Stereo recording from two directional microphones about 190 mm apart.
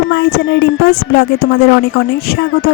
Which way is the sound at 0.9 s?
65° left (ahead or behind).